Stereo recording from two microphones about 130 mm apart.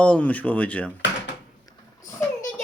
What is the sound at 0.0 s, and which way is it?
Speech, 10° left (ahead or behind).